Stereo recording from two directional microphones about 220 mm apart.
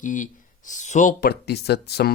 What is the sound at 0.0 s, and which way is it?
Speech, 35° left (ahead or behind).